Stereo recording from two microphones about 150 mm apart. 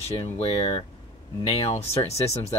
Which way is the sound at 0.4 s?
40° left (ahead or behind).